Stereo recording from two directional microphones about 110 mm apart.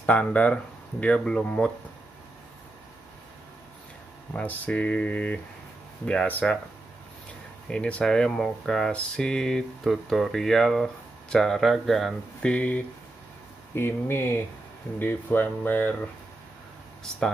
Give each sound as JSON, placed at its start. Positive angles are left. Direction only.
{"t": 0.0, "sound": "speech", "side_deg": 15}
{"t": 4.3, "sound": "speech", "side_deg": 10}
{"t": 7.7, "sound": "speech", "side_deg": 10}